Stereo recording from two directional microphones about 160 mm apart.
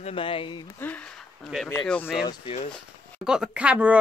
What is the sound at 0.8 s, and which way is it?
Speech, 10° left (ahead or behind).